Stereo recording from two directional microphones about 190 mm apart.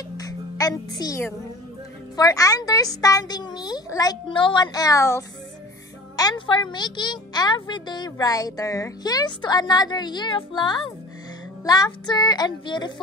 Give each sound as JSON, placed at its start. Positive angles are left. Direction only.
{"t": 0.2, "sound": "music", "side_deg": 20}
{"t": 2.1, "sound": "speech", "side_deg": 20}